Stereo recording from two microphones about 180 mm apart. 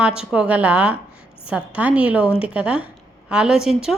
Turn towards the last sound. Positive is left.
turn(degrees=-5)  # may be behind; listen again after turning